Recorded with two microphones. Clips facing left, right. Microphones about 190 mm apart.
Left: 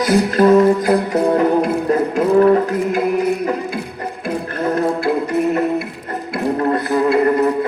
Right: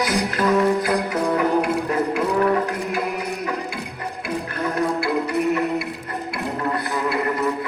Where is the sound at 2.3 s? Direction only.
40° left (ahead or behind).